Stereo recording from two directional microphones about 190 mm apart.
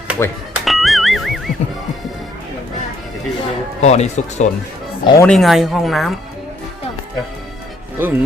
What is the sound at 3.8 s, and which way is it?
Speech, 35° left (ahead or behind).